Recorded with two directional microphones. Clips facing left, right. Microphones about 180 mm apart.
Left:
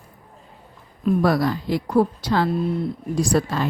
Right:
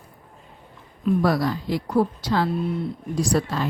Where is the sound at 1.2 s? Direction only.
60° left (ahead or behind).